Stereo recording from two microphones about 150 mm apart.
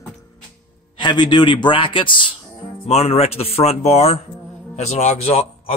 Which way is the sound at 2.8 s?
45° left (ahead or behind).